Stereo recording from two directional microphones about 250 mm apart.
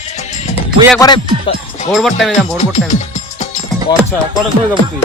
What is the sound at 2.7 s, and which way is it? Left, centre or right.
Music, left.